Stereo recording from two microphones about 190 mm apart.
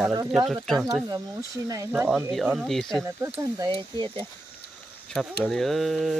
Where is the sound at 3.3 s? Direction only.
25° right (ahead or behind).